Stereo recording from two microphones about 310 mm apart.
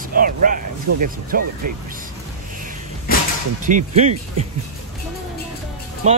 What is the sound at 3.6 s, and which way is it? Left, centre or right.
Speech, right.